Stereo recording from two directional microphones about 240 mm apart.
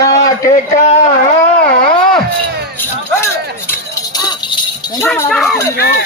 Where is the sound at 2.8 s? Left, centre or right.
Centre.